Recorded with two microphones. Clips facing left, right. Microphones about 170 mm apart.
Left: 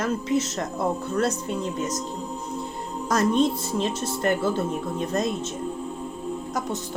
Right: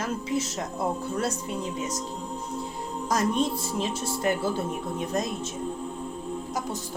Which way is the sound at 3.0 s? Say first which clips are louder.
Left 4 dB; 10° right (ahead or behind).